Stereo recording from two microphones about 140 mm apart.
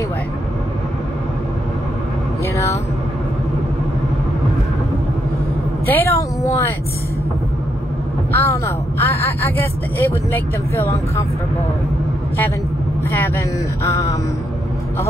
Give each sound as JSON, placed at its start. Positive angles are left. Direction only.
{"t": 2.5, "sound": "vehicle", "side_deg": 20}
{"t": 5.9, "sound": "speech", "side_deg": 20}
{"t": 8.3, "sound": "a woman's voice", "side_deg": 15}